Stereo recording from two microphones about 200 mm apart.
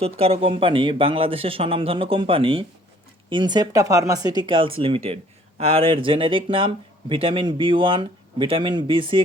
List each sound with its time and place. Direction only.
0.0 s speech: 30° right (ahead or behind)